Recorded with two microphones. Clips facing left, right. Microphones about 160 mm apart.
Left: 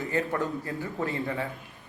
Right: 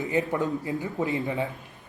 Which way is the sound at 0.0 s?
15° right (ahead or behind).